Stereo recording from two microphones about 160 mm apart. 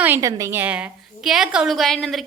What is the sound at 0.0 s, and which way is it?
A woman's voice, 15° right (ahead or behind).